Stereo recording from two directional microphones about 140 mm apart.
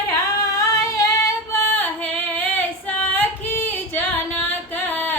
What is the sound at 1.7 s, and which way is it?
Female singing, 10° left (ahead or behind).